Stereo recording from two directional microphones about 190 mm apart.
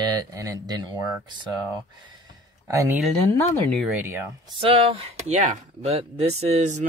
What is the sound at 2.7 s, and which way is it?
Speech, 15° right (ahead or behind).